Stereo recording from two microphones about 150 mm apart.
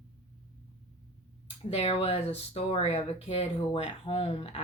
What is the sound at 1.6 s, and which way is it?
Speech, 40° left (ahead or behind).